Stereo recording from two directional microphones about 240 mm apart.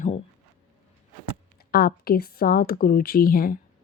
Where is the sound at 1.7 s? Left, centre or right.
Left.